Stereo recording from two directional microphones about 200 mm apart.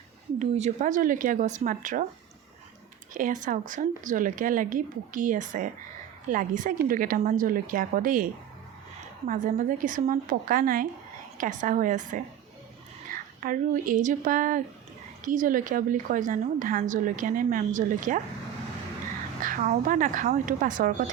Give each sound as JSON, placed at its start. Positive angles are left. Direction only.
{"t": 0.3, "sound": "a woman's voice", "side_deg": -35}
{"t": 3.1, "sound": "a woman's voice", "side_deg": -40}
{"t": 19.4, "sound": "a woman's voice", "side_deg": -40}